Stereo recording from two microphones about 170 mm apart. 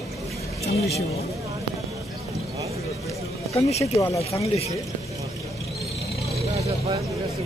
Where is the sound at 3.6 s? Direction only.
40° left (ahead or behind).